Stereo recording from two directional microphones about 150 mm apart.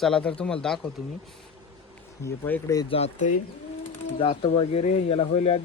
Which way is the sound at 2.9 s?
50° left (ahead or behind).